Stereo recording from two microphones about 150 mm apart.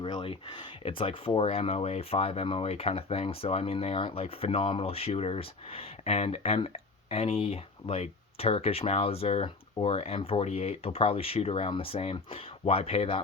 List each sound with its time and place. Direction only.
0.0 s speech: 35° left (ahead or behind)